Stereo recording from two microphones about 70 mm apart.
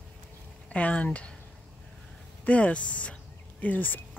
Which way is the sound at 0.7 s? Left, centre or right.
Centre.